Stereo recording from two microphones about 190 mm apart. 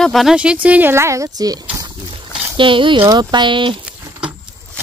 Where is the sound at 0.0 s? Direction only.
Centre (ahead or behind); by 3.7 s 25° right (ahead or behind).